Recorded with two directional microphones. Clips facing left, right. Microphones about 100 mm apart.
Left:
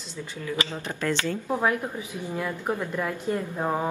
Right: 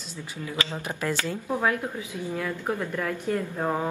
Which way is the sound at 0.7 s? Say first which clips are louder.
Left 1 dB; 15° right (ahead or behind).